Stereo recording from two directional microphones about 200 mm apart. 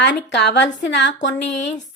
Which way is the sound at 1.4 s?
35° left (ahead or behind).